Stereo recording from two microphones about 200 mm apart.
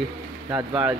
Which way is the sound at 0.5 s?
5° right (ahead or behind).